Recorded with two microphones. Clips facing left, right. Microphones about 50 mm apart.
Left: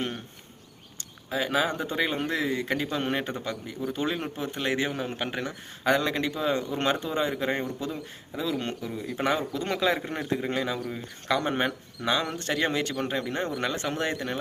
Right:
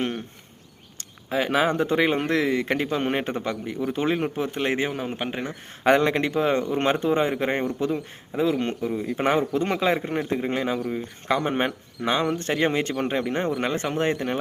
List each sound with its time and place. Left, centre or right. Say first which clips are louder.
0.9 s a man's voice: right 4 dB; right
3.8 s a man's voice: right 5 dB; right
4.9 s a man's voice: right 2 dB; centre
5.8 s a man's voice: right 5 dB; right
10.0 s a man's voice: right 4 dB; centre